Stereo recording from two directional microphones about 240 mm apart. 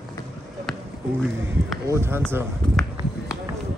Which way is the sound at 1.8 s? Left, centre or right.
Centre.